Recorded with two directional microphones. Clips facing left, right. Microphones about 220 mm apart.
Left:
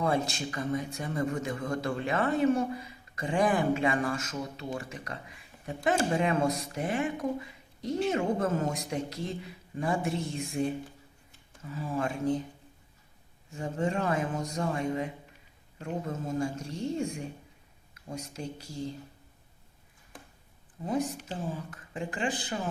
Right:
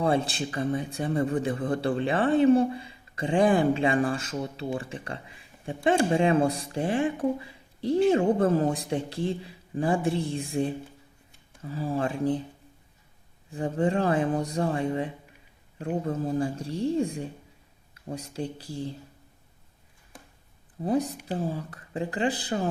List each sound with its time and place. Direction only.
0.0 s a man's voice: 30° right (ahead or behind)
13.5 s a man's voice: 35° right (ahead or behind)
20.8 s a man's voice: 35° right (ahead or behind)